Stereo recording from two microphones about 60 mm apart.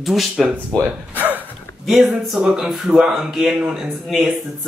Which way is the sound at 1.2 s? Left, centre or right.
Right.